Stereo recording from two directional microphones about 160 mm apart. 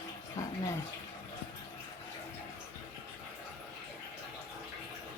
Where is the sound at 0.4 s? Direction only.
20° left (ahead or behind).